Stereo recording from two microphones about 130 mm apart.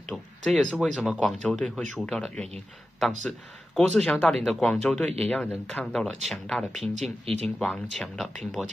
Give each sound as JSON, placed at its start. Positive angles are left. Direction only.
{"t": 0.1, "sound": "speech", "side_deg": 5}
{"t": 6.8, "sound": "speech", "side_deg": -60}
{"t": 7.7, "sound": "speech", "side_deg": 10}
{"t": 8.6, "sound": "speech", "side_deg": -5}